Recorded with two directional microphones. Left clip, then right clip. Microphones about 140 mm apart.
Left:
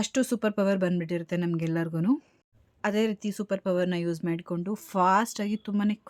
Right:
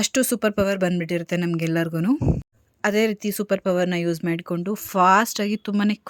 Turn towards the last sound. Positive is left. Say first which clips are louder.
# right 6 dB
turn(degrees=-30)  # may be behind; listen again after turning